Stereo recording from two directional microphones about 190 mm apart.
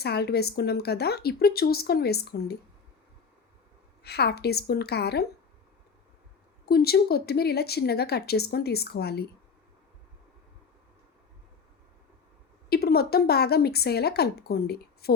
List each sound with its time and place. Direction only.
0.0 s a woman's voice: 60° left (ahead or behind)
4.0 s a woman's voice: 60° left (ahead or behind)
6.7 s a woman's voice: 55° left (ahead or behind)
12.7 s a woman's voice: 55° left (ahead or behind)